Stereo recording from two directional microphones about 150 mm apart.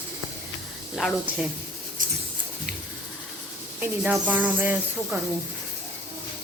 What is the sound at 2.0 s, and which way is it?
Mouse, 60° right (ahead or behind).